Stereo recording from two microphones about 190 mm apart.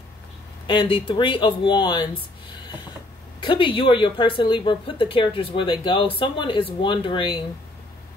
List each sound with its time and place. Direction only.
0.7 s speech: 25° left (ahead or behind)
3.4 s speech: 25° left (ahead or behind)